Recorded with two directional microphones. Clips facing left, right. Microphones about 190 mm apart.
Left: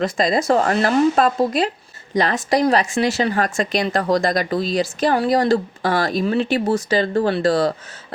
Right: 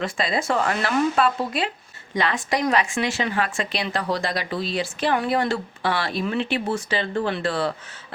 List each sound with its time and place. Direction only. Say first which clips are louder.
0.0 s speech: left 6 dB; 40° left (ahead or behind)